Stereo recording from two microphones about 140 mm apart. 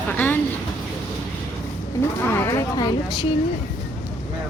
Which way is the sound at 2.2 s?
15° left (ahead or behind).